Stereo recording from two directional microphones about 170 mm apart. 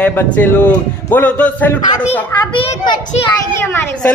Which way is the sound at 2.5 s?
35° left (ahead or behind).